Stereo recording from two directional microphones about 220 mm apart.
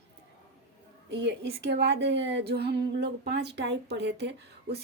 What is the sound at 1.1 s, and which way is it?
A woman's voice, 50° right (ahead or behind).